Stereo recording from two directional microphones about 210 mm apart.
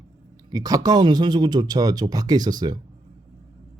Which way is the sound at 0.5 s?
15° right (ahead or behind).